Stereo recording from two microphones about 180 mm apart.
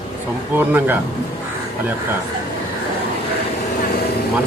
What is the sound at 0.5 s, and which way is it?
Speech, 10° right (ahead or behind).